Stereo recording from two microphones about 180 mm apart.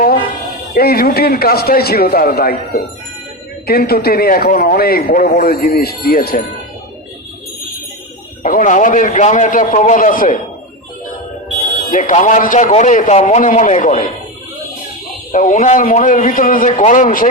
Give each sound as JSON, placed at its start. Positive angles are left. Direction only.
{"t": 0.7, "sound": "a man's voice", "side_deg": 55}
{"t": 8.4, "sound": "a man's voice", "side_deg": 45}
{"t": 11.9, "sound": "a man's voice", "side_deg": 45}
{"t": 15.3, "sound": "a man's voice", "side_deg": 45}